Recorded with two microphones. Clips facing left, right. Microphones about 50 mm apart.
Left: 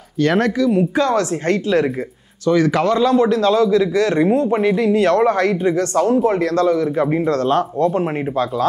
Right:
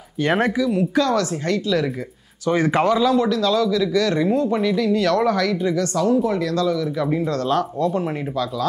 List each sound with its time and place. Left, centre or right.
0.2 s speech: centre
0.6 s speech: centre
0.9 s speech: left
1.4 s speech: left
2.4 s speech: right
3.3 s speech: left